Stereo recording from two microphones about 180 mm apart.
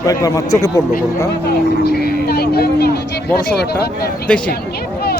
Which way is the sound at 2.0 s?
60° left (ahead or behind).